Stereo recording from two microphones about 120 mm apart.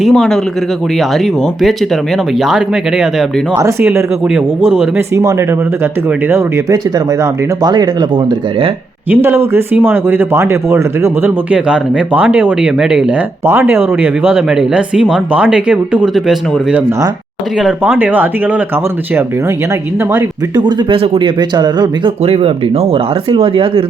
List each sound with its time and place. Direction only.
0.0 s speech: 5° left (ahead or behind)
3.6 s speech: 20° right (ahead or behind)
7.6 s speech: 35° right (ahead or behind)
9.0 s speech: 20° right (ahead or behind)
11.5 s speech: 10° right (ahead or behind)
13.4 s speech: 20° right (ahead or behind)
20.1 s speech: 35° right (ahead or behind)
23.3 s speech: 45° right (ahead or behind)